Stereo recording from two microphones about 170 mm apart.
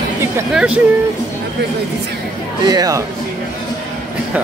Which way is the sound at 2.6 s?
20° right (ahead or behind).